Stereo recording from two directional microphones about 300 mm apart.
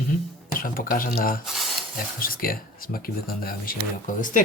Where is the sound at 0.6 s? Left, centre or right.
Left.